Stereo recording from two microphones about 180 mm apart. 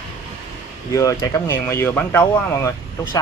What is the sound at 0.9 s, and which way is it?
Speech, 20° left (ahead or behind).